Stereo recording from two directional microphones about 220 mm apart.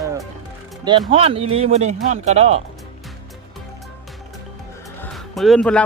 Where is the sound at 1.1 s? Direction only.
25° right (ahead or behind).